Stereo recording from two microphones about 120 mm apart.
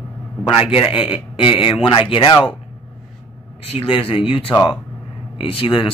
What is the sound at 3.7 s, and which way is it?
Speech, 50° left (ahead or behind).